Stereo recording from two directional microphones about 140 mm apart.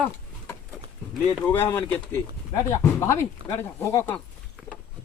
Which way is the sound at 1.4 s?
15° left (ahead or behind).